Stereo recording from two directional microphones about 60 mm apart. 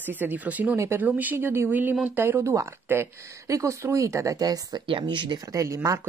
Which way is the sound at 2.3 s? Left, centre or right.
Right.